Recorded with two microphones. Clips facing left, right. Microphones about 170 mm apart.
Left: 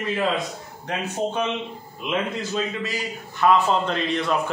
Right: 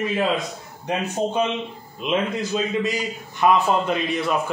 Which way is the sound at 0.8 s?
15° right (ahead or behind).